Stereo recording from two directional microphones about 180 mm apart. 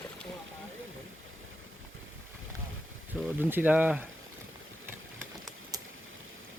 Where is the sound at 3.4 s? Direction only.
10° right (ahead or behind).